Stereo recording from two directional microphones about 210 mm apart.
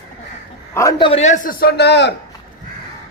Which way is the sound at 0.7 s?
15° left (ahead or behind).